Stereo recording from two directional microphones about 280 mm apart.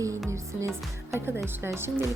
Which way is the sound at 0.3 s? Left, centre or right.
Centre.